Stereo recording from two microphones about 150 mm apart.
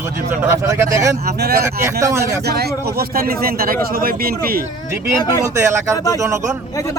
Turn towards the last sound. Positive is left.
turn(degrees=20)  # may be behind; listen again after turning